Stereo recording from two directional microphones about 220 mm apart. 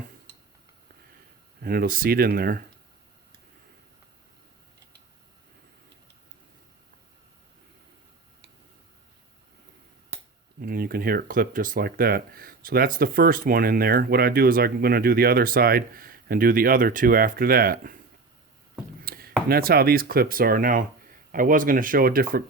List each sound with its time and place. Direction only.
1.6 s speech: 40° right (ahead or behind)
10.6 s speech: 40° right (ahead or behind)
19.0 s speech: 45° right (ahead or behind)